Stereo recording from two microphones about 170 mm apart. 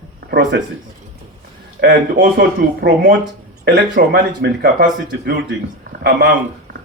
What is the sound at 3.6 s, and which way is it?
Speech, 75° right (ahead or behind).